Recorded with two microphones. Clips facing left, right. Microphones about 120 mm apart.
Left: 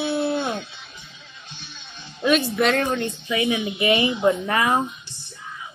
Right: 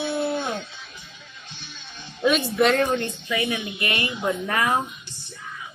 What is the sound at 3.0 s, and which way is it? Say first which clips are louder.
Speech: left 3 dB; 15° left (ahead or behind).